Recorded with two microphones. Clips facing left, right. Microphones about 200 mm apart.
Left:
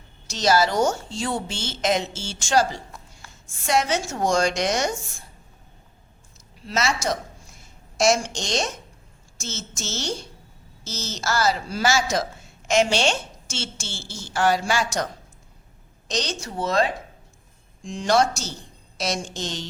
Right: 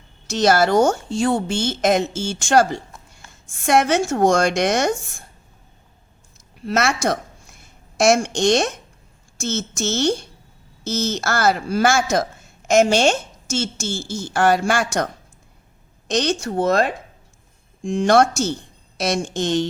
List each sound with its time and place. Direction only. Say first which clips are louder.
0.3 s a woman's voice: right 4 dB; 55° right (ahead or behind)
6.6 s a woman's voice: right 5 dB; 55° right (ahead or behind)